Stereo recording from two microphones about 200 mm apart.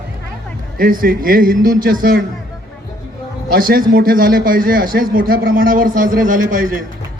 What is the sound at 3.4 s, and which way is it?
A man's voice, 45° right (ahead or behind).